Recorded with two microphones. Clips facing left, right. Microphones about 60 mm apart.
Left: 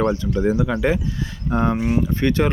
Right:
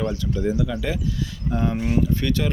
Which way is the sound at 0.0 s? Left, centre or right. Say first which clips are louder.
Left 5 dB; left.